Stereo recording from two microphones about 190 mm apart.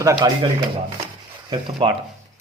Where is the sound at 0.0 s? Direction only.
15° right (ahead or behind).